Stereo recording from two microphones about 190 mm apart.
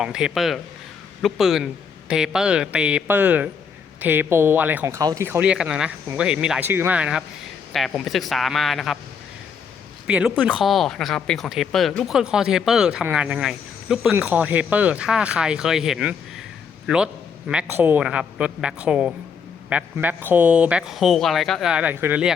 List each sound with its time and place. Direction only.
0.0 s speech: 5° right (ahead or behind)
10.1 s a man's voice: 5° right (ahead or behind)